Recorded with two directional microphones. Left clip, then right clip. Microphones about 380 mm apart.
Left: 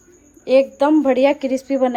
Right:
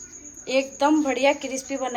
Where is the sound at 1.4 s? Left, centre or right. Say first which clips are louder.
Left 10 dB; left.